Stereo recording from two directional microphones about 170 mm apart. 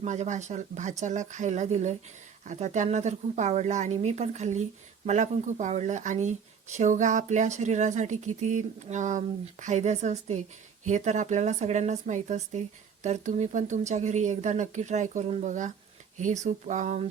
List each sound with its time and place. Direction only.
0.0 s speech: 45° right (ahead or behind)